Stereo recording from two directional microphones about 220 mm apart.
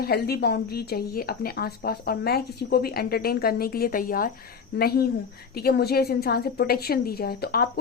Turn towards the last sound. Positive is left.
turn(degrees=45)  # may be behind; listen again after turning